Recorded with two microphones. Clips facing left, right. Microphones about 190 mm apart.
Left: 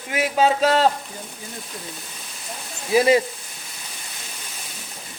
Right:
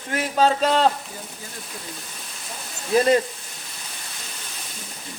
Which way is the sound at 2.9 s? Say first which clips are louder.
Left 1 dB; 5° left (ahead or behind).